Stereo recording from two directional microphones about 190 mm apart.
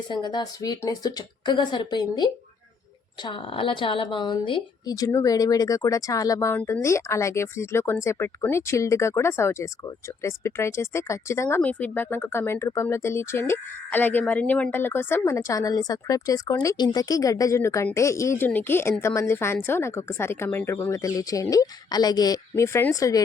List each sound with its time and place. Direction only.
0.1 s a woman's voice: 25° left (ahead or behind)